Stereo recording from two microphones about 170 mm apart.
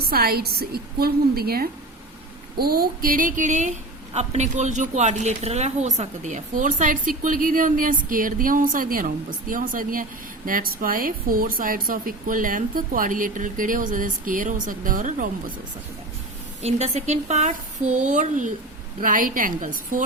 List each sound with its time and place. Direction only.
0.1 s a woman's voice: 65° right (ahead or behind)
16.6 s a woman's voice: 40° right (ahead or behind)